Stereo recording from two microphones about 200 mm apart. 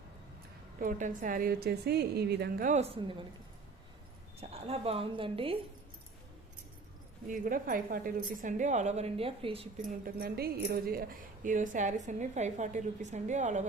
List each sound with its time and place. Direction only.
0.8 s a woman's voice: 40° right (ahead or behind)
4.4 s a woman's voice: 30° right (ahead or behind)
7.3 s speech: 40° right (ahead or behind)
10.0 s speech: 50° right (ahead or behind)